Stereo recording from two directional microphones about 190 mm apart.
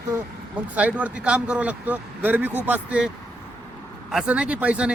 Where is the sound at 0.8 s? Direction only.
10° right (ahead or behind).